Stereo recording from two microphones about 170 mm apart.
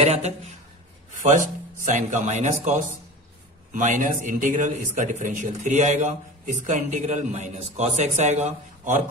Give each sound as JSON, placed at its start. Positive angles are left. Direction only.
{"t": 0.0, "sound": "speech", "side_deg": -40}
{"t": 1.9, "sound": "a man's voice", "side_deg": -45}